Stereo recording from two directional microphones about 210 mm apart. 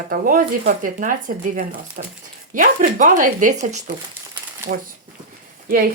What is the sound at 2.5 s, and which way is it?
Speech, 40° right (ahead or behind).